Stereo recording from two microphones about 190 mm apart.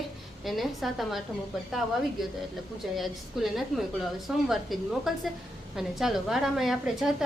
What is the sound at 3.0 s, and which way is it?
A woman's voice, centre (ahead or behind).